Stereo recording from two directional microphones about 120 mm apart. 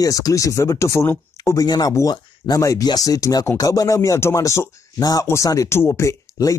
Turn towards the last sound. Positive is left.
turn(degrees=25)  # may be behind; listen again after turning